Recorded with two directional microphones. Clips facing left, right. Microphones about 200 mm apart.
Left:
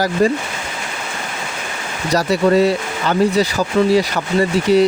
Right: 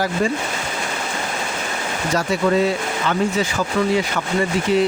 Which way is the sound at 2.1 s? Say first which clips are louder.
Left 5 dB; 40° left (ahead or behind).